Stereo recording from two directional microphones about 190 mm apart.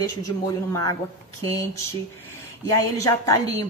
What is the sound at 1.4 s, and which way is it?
A woman's voice, 15° left (ahead or behind).